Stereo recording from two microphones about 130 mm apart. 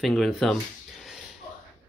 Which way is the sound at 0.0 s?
Centre (ahead or behind).